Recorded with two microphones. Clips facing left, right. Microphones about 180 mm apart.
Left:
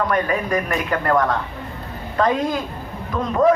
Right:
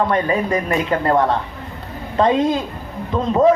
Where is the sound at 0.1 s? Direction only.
25° right (ahead or behind).